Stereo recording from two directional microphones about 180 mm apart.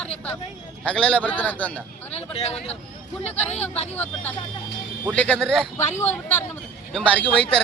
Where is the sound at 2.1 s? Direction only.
35° left (ahead or behind).